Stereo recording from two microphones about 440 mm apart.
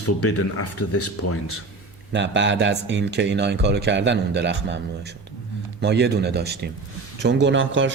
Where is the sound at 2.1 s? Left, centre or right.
Right.